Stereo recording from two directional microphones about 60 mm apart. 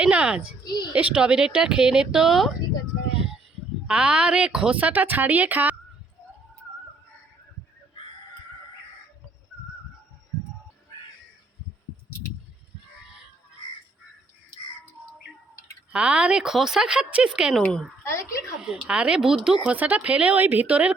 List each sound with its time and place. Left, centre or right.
0.0 s speech: centre
3.8 s speech: centre
15.9 s speech: right
17.5 s speech: centre
18.0 s a woman's voice: left
18.6 s speech: centre
19.7 s speech: right